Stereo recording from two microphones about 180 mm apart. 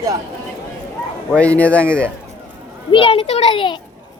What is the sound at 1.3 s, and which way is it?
Speech, 5° left (ahead or behind).